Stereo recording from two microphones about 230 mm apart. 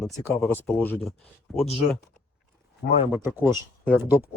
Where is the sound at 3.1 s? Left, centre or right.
Centre.